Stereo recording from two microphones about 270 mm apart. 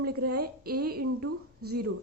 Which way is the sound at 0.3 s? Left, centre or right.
Right.